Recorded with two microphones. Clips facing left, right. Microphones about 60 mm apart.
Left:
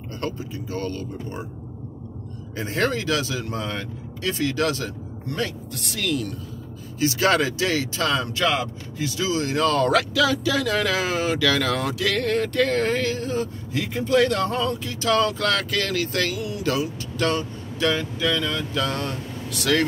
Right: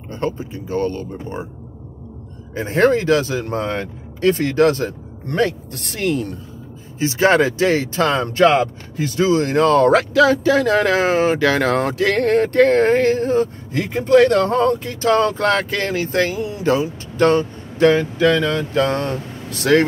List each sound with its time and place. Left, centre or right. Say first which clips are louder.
0.1 s speech: right 6 dB; right
2.5 s speech: right 9 dB; right